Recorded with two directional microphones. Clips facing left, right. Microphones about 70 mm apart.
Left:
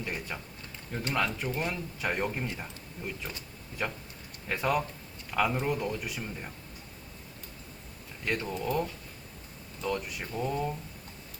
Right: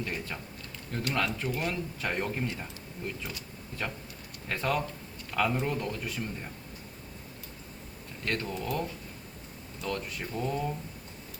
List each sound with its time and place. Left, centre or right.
0.0 s speech: centre
8.2 s speech: centre